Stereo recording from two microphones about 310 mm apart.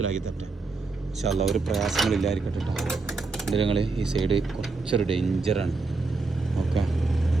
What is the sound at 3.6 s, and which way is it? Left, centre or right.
Speech, centre.